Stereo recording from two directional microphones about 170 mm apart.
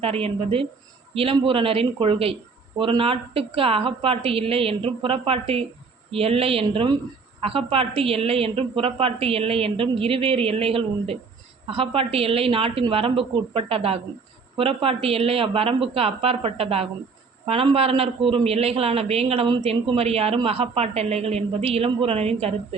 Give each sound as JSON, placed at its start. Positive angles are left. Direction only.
{"t": 0.0, "sound": "a man's voice", "side_deg": -35}